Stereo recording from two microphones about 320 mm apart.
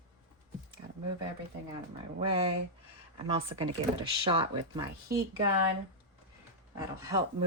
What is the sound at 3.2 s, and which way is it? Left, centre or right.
Speech, centre.